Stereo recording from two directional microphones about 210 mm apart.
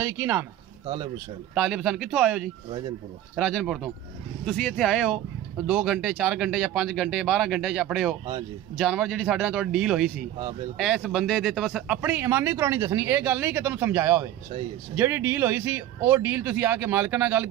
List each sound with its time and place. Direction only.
0.0 s speech: 10° right (ahead or behind)
0.8 s speech: 25° right (ahead or behind)
1.5 s speech: 5° right (ahead or behind)